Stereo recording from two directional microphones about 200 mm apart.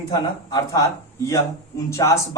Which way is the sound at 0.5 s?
15° left (ahead or behind).